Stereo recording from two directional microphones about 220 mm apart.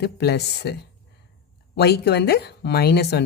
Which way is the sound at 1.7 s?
45° left (ahead or behind).